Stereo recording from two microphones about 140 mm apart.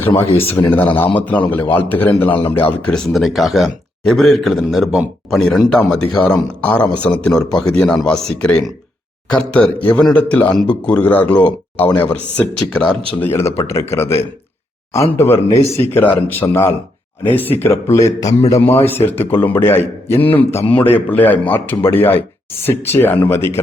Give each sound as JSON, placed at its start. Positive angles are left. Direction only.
{"t": 0.3, "sound": "a man's voice", "side_deg": 15}
{"t": 3.1, "sound": "a man's voice", "side_deg": 0}
{"t": 13.2, "sound": "a man's voice", "side_deg": 20}